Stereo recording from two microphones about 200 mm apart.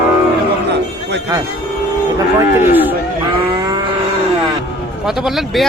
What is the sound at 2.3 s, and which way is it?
Speech, 10° right (ahead or behind).